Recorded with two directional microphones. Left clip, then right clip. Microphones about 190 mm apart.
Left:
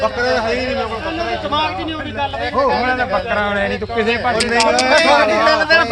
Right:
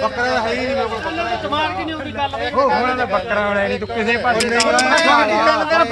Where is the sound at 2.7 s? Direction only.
20° right (ahead or behind).